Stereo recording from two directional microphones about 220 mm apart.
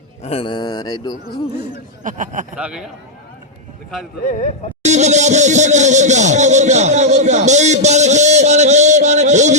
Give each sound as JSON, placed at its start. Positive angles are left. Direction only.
{"t": 0.2, "sound": "a man's voice", "side_deg": 25}
{"t": 2.0, "sound": "speech", "side_deg": -35}
{"t": 2.6, "sound": "a man's voice", "side_deg": -5}
{"t": 4.8, "sound": "music", "side_deg": -30}